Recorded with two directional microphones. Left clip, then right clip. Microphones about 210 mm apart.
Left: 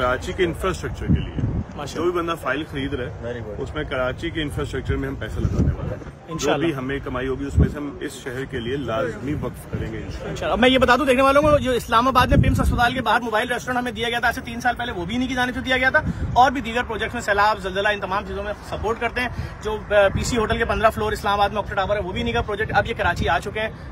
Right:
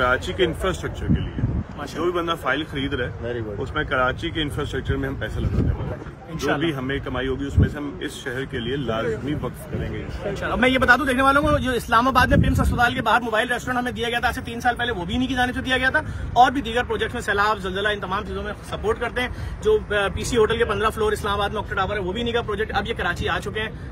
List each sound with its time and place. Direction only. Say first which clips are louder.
0.0 s speech: right 1 dB; 5° left (ahead or behind)
2.0 s speech: even; 5° left (ahead or behind)
6.3 s a man's voice: left 2 dB; 35° left (ahead or behind)
6.8 s a man's voice: even; 10° left (ahead or behind)
10.4 s a man's voice: left 3 dB; 40° left (ahead or behind)